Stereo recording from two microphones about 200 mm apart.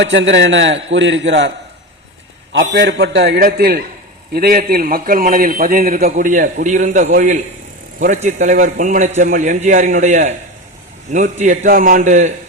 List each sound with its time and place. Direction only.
0.0 s a man's voice: 65° right (ahead or behind); by 12.3 s 40° right (ahead or behind)